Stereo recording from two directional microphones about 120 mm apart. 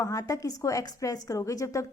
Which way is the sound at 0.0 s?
30° left (ahead or behind).